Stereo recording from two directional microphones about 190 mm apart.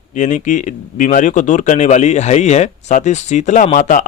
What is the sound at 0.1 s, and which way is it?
Speech, 40° left (ahead or behind).